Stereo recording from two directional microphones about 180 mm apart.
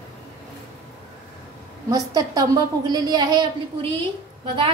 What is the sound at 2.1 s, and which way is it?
A woman's voice, 20° right (ahead or behind).